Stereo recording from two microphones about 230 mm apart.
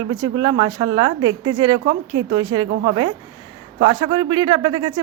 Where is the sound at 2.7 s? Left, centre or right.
Right.